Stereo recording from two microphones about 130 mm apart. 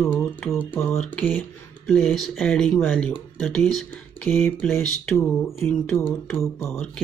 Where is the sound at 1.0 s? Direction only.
5° left (ahead or behind).